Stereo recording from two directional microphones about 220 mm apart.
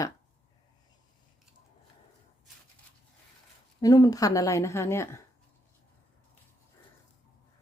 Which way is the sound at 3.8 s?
15° left (ahead or behind).